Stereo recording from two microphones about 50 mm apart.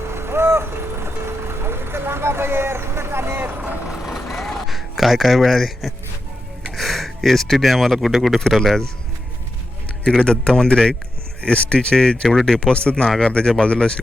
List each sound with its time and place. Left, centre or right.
0.1 s vehicle: right
3.8 s vehicle: centre
6.7 s a sound: centre
8.0 s speech: centre
8.4 s speech: centre
10.0 s speech: centre
13.1 s speech: centre